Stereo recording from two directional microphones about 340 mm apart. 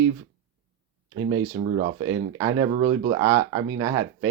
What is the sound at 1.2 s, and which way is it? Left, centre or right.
Speech, centre.